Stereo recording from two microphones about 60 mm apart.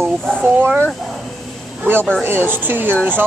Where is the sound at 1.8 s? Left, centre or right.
Right.